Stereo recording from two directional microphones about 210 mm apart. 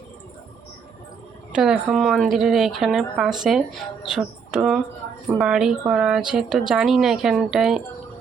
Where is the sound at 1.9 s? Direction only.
Centre (ahead or behind).